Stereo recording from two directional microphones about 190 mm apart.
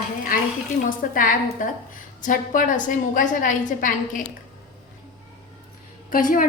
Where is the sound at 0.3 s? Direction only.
45° left (ahead or behind).